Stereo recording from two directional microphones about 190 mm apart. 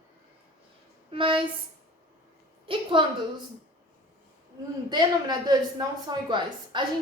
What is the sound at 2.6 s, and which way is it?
Speech, 25° right (ahead or behind).